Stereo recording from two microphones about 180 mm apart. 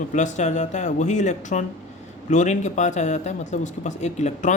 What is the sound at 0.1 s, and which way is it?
Speech, 40° left (ahead or behind).